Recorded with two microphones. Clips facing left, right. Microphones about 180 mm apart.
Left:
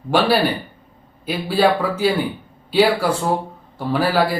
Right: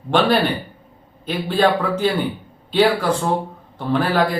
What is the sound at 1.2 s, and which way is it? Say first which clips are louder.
Speech: left 1 dB; 10° left (ahead or behind).